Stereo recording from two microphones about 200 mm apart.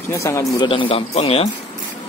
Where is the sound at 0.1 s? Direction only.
15° left (ahead or behind); by 1.5 s 30° left (ahead or behind).